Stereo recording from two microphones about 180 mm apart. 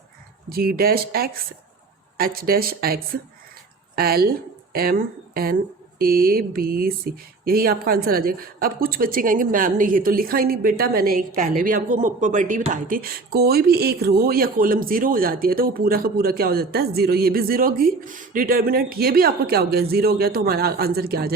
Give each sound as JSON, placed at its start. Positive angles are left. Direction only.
{"t": 0.5, "sound": "speech", "side_deg": -55}